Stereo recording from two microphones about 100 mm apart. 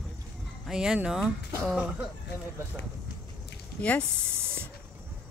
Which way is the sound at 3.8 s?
10° left (ahead or behind).